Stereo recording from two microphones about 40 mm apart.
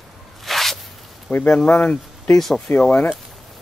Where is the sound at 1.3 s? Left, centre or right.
Left.